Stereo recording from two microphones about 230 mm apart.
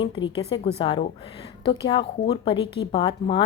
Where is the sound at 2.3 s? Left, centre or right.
Left.